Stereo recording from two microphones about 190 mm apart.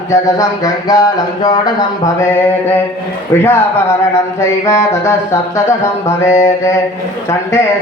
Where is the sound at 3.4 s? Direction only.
15° left (ahead or behind).